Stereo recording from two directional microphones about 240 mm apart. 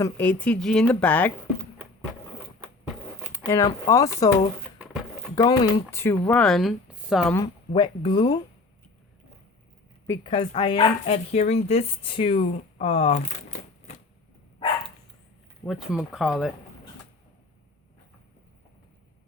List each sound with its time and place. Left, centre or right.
0.0 s speech: centre
3.3 s speech: centre
7.7 s speech: centre
10.1 s speech: left
15.6 s speech: centre